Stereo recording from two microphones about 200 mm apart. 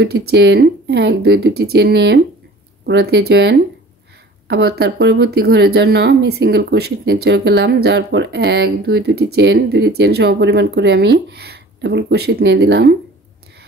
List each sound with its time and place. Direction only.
0.3 s speech: 55° right (ahead or behind)